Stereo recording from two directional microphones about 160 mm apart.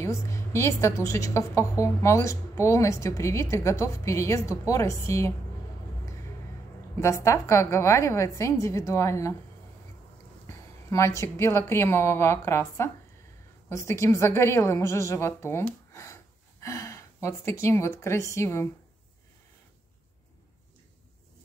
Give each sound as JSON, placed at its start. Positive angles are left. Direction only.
{"t": 0.0, "sound": "a woman's voice", "side_deg": 20}
{"t": 7.2, "sound": "a woman's voice", "side_deg": 20}
{"t": 10.4, "sound": "a woman's voice", "side_deg": 15}